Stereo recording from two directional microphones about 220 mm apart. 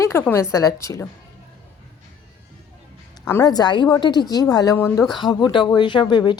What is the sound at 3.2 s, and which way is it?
A woman's voice, 10° left (ahead or behind).